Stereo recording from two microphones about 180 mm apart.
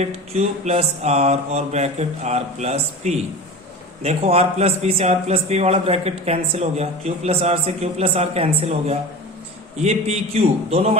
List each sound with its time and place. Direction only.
0.0 s a man's voice: 35° right (ahead or behind)